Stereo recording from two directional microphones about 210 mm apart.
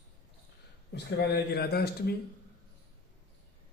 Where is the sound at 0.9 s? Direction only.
55° left (ahead or behind).